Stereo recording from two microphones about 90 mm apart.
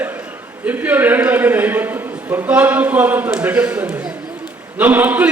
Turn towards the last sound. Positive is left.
turn(degrees=-20)  # may be behind; listen again after turning